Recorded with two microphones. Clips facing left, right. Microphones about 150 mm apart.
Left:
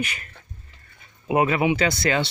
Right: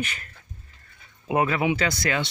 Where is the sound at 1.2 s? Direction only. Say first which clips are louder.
Left 3 dB; 15° left (ahead or behind).